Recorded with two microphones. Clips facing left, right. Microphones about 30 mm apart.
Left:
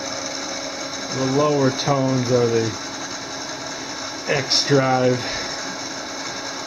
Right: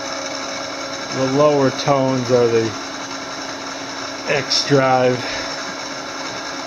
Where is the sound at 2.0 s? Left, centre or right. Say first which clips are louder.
Right 4 dB; right.